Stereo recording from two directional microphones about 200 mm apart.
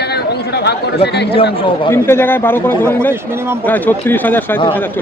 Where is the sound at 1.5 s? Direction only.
25° left (ahead or behind).